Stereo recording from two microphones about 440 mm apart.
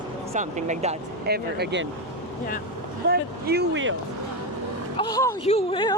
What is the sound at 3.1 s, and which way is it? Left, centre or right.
Speech, right.